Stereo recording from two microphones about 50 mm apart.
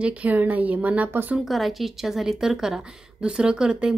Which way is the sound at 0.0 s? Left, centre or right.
Right.